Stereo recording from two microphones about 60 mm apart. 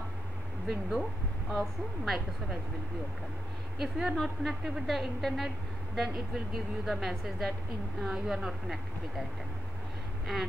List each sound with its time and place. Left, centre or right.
0.7 s speech: centre
3.8 s a woman's voice: centre